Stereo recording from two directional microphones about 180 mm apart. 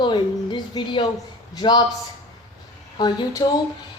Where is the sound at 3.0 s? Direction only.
25° left (ahead or behind).